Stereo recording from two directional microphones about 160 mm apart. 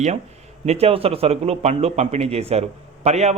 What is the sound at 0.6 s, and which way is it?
A man's voice, 40° right (ahead or behind).